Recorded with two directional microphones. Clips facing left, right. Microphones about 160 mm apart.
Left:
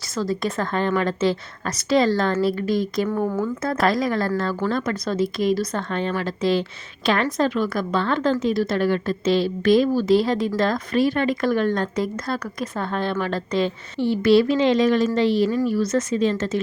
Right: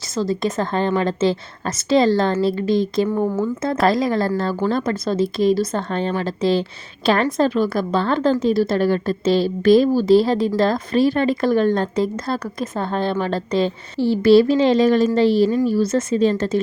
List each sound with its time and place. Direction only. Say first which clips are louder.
0.2 s a woman's voice: right 3 dB; 20° right (ahead or behind)
3.1 s a woman's voice: right 3 dB; 15° right (ahead or behind); by 16.6 s 35° right (ahead or behind)